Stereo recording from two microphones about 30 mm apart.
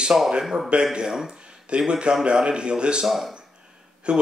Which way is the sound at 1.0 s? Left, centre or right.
Centre.